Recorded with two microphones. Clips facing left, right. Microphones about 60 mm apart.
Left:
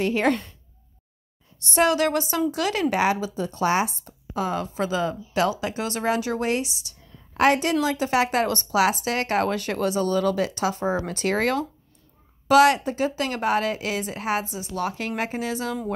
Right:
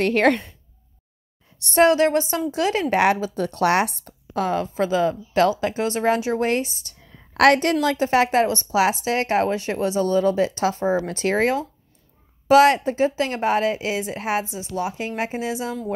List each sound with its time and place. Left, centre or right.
0.0 s a woman's voice: right
1.7 s a woman's voice: right
2.9 s speech: right
7.3 s a woman's voice: right
7.8 s a woman's voice: right
14.8 s a woman's voice: centre